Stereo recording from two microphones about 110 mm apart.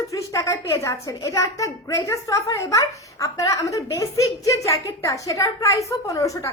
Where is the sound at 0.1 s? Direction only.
30° left (ahead or behind).